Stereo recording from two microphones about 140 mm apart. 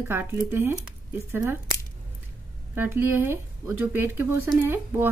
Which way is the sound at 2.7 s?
15° right (ahead or behind).